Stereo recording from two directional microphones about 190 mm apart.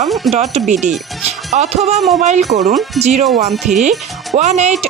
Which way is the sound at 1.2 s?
35° right (ahead or behind).